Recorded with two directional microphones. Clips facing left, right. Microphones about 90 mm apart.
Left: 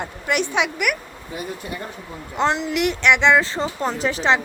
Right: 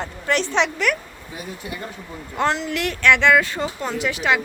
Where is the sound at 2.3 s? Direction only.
20° left (ahead or behind).